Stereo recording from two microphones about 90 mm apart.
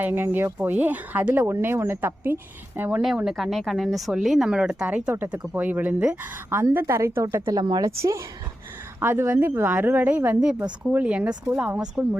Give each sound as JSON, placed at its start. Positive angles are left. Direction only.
{"t": 0.0, "sound": "speech", "side_deg": -20}
{"t": 3.2, "sound": "speech", "side_deg": 0}
{"t": 6.5, "sound": "a woman's voice", "side_deg": -30}
{"t": 7.5, "sound": "speech", "side_deg": -50}
{"t": 7.9, "sound": "a woman's voice", "side_deg": -35}